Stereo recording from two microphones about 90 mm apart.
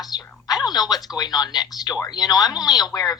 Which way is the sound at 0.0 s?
45° left (ahead or behind).